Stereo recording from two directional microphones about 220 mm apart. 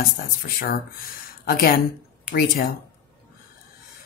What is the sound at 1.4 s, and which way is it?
Speech, 45° left (ahead or behind).